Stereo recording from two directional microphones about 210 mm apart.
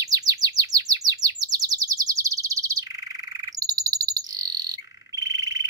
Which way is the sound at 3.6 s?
15° right (ahead or behind).